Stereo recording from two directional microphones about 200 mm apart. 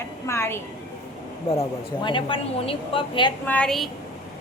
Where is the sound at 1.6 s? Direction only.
25° left (ahead or behind).